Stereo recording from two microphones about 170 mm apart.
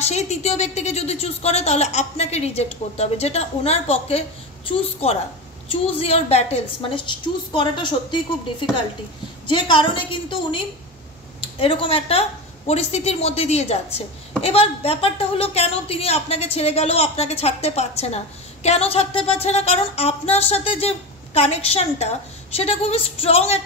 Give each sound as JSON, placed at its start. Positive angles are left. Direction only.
{"t": 0.1, "sound": "a woman's voice", "side_deg": 40}